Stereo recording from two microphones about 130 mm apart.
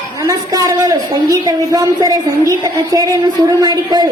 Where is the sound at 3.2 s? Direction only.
30° right (ahead or behind).